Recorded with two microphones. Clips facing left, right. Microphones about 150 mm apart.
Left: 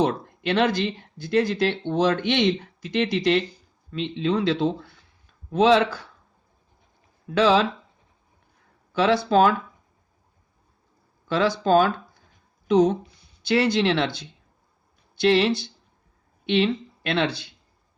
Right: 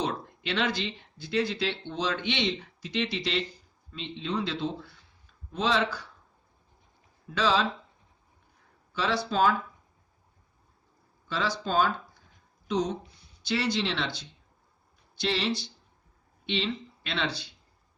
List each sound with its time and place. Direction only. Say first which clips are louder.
0.0 s speech: left 8 dB; 50° left (ahead or behind)
3.9 s speech: left 8 dB; 75° left (ahead or behind)
7.3 s speech: left 7 dB; 60° left (ahead or behind)
9.0 s speech: left 8 dB; 60° left (ahead or behind)
11.3 s speech: left 10 dB; 65° left (ahead or behind)